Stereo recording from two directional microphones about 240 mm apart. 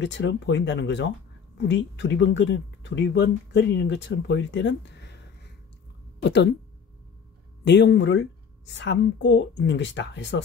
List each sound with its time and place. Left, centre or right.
0.0 s speech: left
6.2 s speech: left
7.6 s speech: left